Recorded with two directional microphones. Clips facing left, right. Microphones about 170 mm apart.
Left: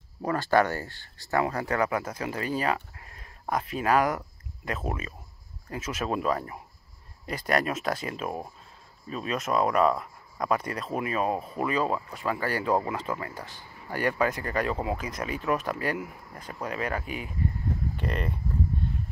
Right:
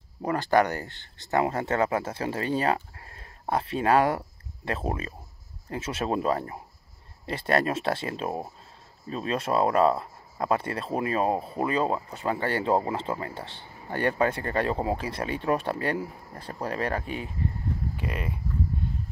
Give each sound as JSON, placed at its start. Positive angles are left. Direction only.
{"t": 0.2, "sound": "speech", "side_deg": -20}
{"t": 17.9, "sound": "speech", "side_deg": -5}